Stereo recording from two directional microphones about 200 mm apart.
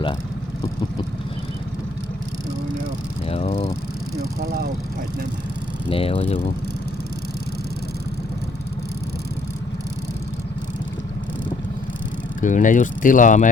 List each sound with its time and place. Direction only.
3.2 s vehicle: 30° left (ahead or behind)
5.9 s speech: 30° left (ahead or behind)
12.4 s speech: 40° left (ahead or behind)